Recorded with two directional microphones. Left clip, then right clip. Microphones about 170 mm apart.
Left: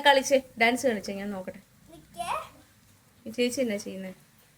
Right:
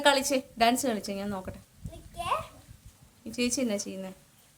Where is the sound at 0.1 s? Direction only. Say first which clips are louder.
Left 5 dB; 10° right (ahead or behind).